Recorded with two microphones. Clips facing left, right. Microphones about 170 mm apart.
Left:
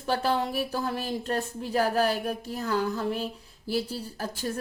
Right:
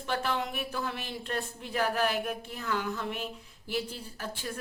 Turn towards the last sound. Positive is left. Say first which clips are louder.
# left 5 dB
turn(degrees=40)  # may be behind; listen again after turning